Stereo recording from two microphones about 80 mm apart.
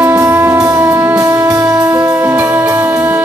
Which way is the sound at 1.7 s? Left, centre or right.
Right.